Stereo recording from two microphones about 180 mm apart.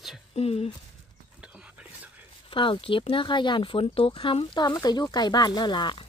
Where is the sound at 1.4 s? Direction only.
5° right (ahead or behind).